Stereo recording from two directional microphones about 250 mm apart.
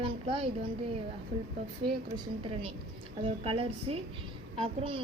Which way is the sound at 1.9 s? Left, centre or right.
Centre.